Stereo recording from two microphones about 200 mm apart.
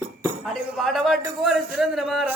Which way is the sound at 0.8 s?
Centre (ahead or behind).